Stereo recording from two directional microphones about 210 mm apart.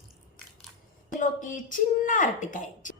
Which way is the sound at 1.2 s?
40° left (ahead or behind).